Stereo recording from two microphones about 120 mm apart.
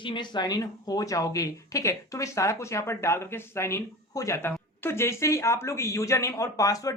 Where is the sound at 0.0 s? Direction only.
40° left (ahead or behind).